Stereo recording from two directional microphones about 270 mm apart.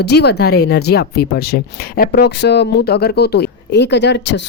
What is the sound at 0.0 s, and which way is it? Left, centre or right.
Speech, left.